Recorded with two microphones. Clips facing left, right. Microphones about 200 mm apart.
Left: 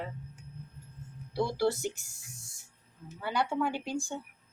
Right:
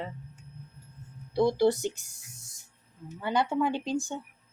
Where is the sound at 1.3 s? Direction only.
20° right (ahead or behind).